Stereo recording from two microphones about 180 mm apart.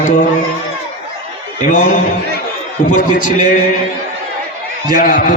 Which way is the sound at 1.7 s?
45° left (ahead or behind).